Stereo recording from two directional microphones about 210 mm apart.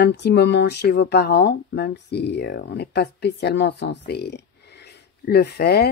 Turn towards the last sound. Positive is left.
turn(degrees=50)  # may be behind; listen again after turning